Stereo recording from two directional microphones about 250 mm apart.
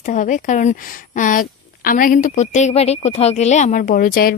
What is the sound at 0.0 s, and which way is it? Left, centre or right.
Speech, left.